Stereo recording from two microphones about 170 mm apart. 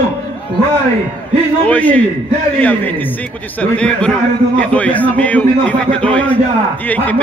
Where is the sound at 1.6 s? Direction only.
10° left (ahead or behind).